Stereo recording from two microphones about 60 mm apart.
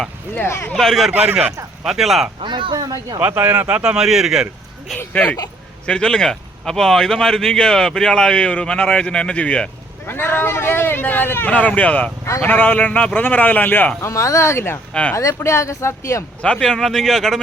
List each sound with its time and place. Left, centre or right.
0.3 s speech: left
0.7 s speech: centre
2.7 s speech: right
3.2 s speech: right
3.8 s speech: centre
4.9 s speech: left
5.8 s speech: centre
10.1 s speech: left
11.5 s speech: left
14.0 s speech: left
15.1 s speech: left
16.4 s speech: centre